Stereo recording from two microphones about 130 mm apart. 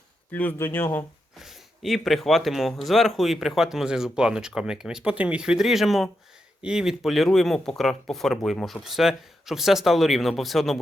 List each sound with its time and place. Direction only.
0.3 s speech: 15° left (ahead or behind)
1.4 s speech: centre (ahead or behind)